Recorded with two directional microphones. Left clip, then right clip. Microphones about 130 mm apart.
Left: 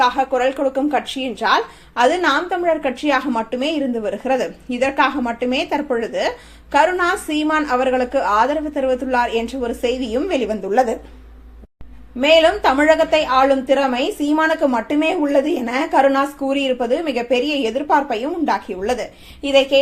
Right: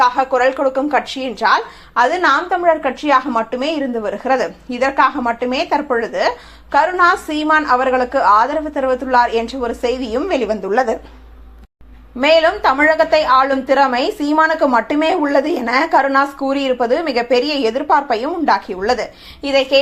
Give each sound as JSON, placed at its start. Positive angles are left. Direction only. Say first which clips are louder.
{"t": 0.0, "sound": "a woman's voice", "louder": "right 3 dB", "side_deg": 15}
{"t": 12.2, "sound": "a woman's voice", "louder": "right 1 dB", "side_deg": 0}